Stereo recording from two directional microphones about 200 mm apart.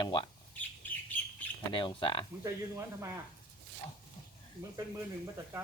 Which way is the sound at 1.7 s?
25° left (ahead or behind).